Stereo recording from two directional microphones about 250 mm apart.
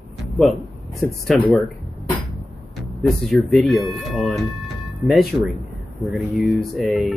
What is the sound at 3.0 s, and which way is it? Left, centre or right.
Speech, centre.